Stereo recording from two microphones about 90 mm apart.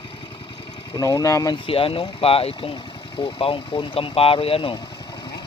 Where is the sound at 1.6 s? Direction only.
90° left.